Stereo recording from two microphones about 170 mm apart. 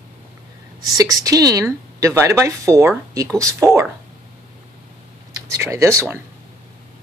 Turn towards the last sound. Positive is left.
turn(degrees=-15)  # may be behind; listen again after turning